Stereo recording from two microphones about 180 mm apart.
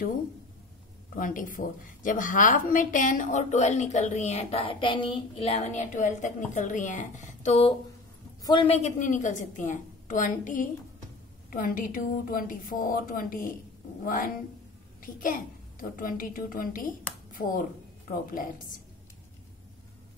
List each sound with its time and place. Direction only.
1.1 s a woman's voice: 50° left (ahead or behind)